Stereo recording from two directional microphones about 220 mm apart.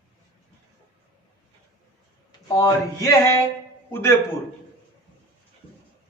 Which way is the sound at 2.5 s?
15° left (ahead or behind).